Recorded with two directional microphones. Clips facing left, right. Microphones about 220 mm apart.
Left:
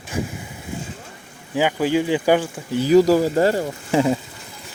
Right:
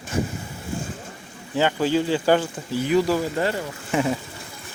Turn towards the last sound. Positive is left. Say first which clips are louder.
# left 4 dB
turn(degrees=30)  # may be behind; listen again after turning